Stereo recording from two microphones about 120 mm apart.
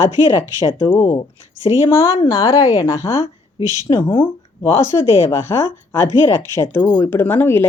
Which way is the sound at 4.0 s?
40° left (ahead or behind).